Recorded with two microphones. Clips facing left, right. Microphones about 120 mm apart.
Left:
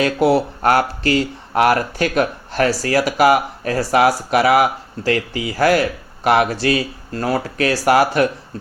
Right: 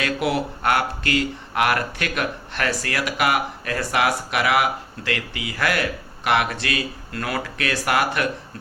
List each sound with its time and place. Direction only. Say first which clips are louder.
0.0 s speech: left 8 dB; 35° left (ahead or behind)